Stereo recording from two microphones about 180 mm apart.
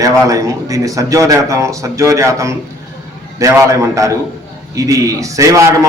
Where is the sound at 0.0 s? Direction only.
20° right (ahead or behind).